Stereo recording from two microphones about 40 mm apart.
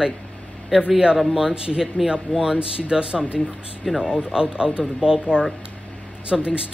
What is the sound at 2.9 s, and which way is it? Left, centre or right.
Speech, right.